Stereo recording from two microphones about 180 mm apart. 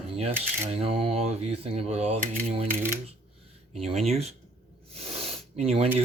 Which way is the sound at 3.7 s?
35° right (ahead or behind).